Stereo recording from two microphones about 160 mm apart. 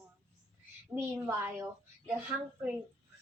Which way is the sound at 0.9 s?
15° right (ahead or behind).